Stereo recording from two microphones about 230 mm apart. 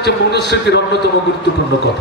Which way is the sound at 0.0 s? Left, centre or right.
Left.